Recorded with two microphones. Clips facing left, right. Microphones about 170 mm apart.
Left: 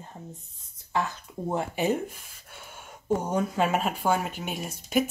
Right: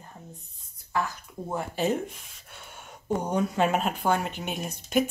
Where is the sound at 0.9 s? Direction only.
20° left (ahead or behind).